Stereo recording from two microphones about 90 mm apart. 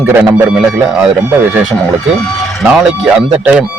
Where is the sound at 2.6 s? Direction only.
10° right (ahead or behind).